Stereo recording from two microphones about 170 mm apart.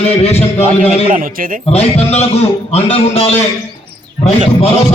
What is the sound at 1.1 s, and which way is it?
Speech, 55° right (ahead or behind).